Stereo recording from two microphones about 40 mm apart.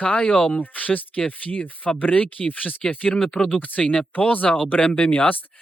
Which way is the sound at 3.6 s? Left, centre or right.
Left.